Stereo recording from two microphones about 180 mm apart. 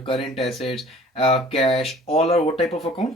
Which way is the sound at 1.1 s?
30° left (ahead or behind).